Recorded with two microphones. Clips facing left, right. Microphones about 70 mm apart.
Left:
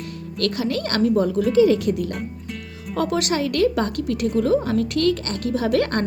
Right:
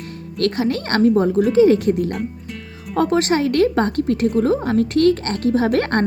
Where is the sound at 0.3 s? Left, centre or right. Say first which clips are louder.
Right 4 dB; right.